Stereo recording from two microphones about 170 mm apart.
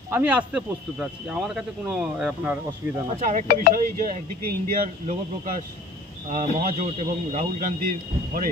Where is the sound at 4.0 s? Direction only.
50° right (ahead or behind).